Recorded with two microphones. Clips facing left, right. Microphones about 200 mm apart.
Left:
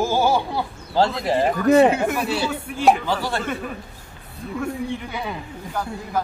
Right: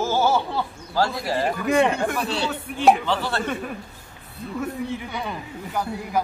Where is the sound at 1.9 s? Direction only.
5° left (ahead or behind).